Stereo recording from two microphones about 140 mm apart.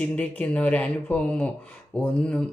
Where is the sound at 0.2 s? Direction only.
10° left (ahead or behind).